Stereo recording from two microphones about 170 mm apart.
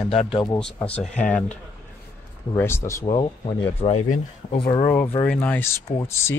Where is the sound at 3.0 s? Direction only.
35° left (ahead or behind).